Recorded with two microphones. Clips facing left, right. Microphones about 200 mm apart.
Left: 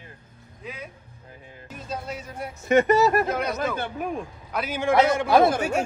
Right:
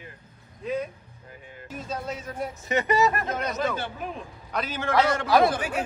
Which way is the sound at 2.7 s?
50° left (ahead or behind).